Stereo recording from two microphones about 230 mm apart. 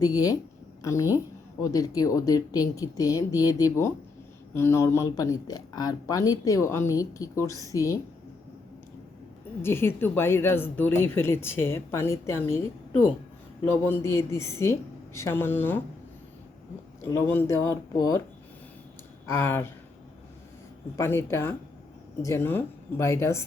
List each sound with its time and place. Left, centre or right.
0.0 s a woman's voice: centre
9.6 s speech: centre
13.7 s speech: centre
17.0 s speech: centre
19.2 s speech: centre
20.9 s speech: centre